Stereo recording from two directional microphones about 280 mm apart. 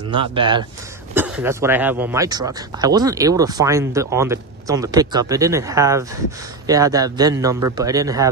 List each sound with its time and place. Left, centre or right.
0.1 s speech: centre
1.1 s speech: centre